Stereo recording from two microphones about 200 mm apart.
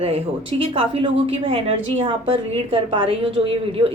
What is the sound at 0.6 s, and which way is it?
A woman's voice, 25° right (ahead or behind).